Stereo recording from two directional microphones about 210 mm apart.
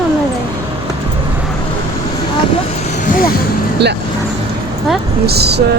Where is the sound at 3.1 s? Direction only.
40° left (ahead or behind).